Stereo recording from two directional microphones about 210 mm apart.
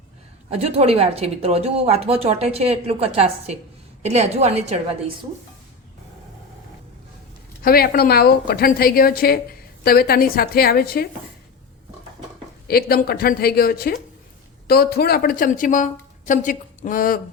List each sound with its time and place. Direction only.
0.5 s a woman's voice: 30° right (ahead or behind)
7.6 s a woman's voice: 45° left (ahead or behind)
12.6 s a woman's voice: 45° left (ahead or behind)